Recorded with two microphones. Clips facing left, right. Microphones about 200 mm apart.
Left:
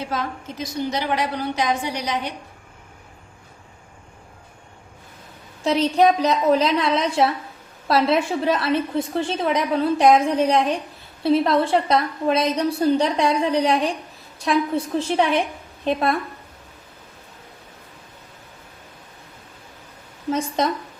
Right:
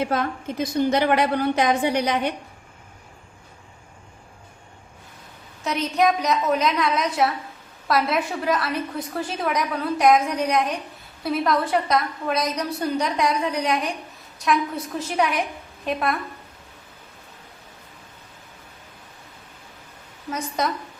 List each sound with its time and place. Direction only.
0.0 s a woman's voice: 55° right (ahead or behind)
5.6 s a woman's voice: 30° left (ahead or behind)
20.3 s a woman's voice: 25° left (ahead or behind)